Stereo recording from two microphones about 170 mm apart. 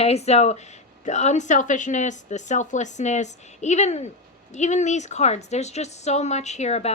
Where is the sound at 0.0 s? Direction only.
40° left (ahead or behind).